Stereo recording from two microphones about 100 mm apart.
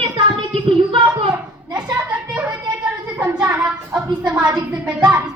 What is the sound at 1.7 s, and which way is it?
Children playing, 10° right (ahead or behind).